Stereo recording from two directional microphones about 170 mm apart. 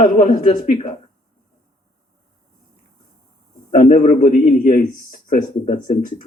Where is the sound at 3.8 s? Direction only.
45° left (ahead or behind).